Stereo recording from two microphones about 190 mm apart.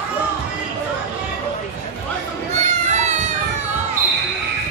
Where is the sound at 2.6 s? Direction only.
40° right (ahead or behind).